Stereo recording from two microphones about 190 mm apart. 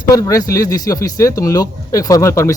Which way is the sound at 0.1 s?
20° left (ahead or behind).